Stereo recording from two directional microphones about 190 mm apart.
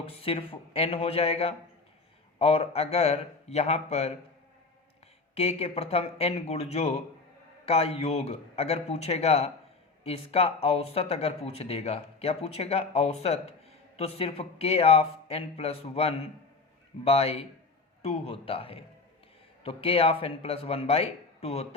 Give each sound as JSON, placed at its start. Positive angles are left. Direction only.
{"t": 0.0, "sound": "speech", "side_deg": 30}
{"t": 5.3, "sound": "a man's voice", "side_deg": 30}